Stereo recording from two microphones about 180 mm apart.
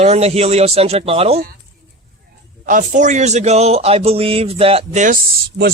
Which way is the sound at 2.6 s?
45° right (ahead or behind).